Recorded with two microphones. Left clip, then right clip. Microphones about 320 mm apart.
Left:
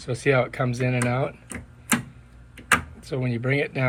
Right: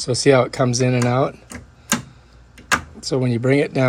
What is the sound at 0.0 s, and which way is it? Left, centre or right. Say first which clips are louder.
Speech: right 7 dB; centre.